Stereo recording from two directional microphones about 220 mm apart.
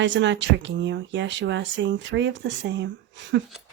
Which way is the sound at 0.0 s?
55° right (ahead or behind).